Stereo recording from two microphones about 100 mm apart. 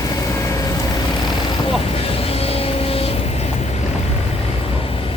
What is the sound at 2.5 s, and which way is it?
Vehicle, 70° left (ahead or behind).